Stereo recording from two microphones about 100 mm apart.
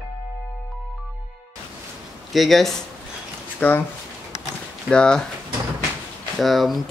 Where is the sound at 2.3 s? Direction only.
Centre (ahead or behind).